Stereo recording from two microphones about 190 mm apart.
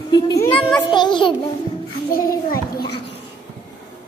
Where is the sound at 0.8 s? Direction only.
25° left (ahead or behind).